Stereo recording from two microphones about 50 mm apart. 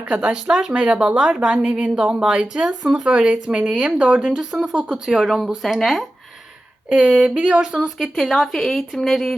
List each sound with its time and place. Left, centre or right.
0.0 s speech: centre
2.2 s speech: centre
2.6 s speech: centre
3.0 s speech: right
3.7 s speech: centre
3.9 s speech: right
4.4 s speech: centre
7.0 s speech: right
7.6 s speech: centre